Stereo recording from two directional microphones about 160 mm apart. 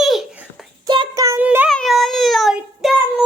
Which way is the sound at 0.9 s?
25° right (ahead or behind).